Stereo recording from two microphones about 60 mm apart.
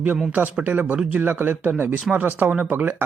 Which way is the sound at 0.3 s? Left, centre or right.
Right.